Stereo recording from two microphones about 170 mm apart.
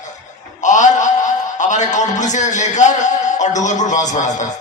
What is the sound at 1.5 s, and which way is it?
A man's voice, 45° left (ahead or behind).